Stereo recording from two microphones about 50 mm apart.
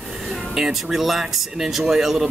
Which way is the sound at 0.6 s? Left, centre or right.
Centre.